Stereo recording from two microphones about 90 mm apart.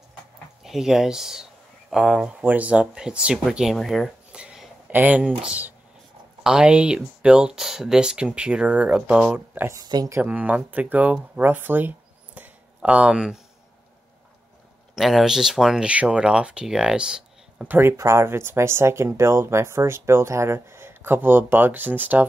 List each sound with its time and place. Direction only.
0.7 s speech: 5° right (ahead or behind)
4.3 s a sound: 10° right (ahead or behind)
4.9 s speech: 15° right (ahead or behind)
9.9 s speech: 50° right (ahead or behind)
10.2 s speech: 20° right (ahead or behind)
12.4 s a sound: 15° right (ahead or behind)
15.0 s speech: centre (ahead or behind)
17.6 s speech: 25° right (ahead or behind)